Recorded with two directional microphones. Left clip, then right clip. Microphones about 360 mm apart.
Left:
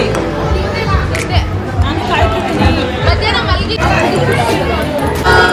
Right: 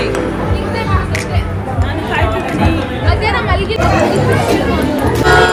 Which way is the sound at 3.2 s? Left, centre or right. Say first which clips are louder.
Left 1 dB; centre.